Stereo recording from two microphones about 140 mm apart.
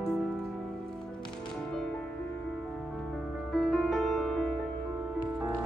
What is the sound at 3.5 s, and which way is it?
Music, 5° left (ahead or behind).